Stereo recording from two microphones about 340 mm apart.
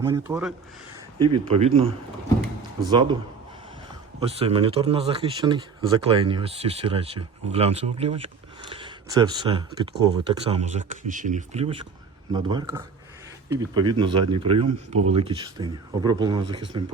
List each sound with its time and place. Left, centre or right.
0.0 s speech: centre
1.2 s speech: centre
4.2 s speech: centre